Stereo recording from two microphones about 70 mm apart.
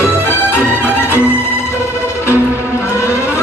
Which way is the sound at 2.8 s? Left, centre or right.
Left.